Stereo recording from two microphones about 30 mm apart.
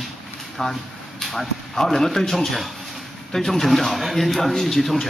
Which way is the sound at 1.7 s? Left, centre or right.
Centre.